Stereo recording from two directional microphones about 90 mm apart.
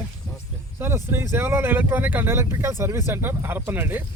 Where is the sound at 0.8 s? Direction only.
25° right (ahead or behind).